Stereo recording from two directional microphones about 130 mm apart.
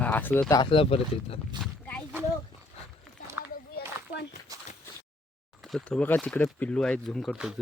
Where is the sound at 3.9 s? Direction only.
20° right (ahead or behind).